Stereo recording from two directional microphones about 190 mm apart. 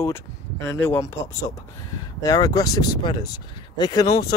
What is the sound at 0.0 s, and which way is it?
Speech, 15° left (ahead or behind).